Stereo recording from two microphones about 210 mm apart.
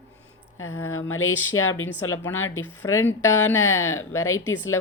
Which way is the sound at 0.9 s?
85° left.